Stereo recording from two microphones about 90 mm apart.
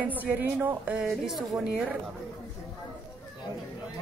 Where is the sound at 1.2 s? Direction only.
Centre (ahead or behind).